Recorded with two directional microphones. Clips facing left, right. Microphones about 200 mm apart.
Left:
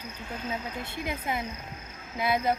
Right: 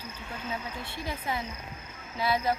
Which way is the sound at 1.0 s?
20° left (ahead or behind).